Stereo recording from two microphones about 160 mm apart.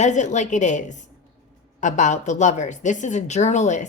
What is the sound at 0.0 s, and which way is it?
A woman's voice, 50° left (ahead or behind).